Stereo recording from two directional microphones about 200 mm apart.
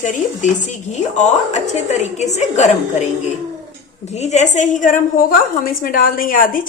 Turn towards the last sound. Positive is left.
turn(degrees=45)  # may be behind; listen again after turning